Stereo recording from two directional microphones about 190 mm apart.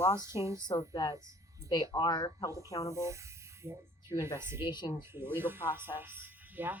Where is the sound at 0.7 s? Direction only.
20° left (ahead or behind).